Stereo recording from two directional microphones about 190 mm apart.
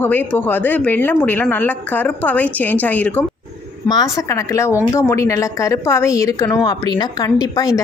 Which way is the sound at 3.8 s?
20° left (ahead or behind).